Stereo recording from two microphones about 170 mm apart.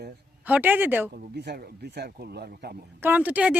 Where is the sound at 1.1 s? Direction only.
70° right (ahead or behind).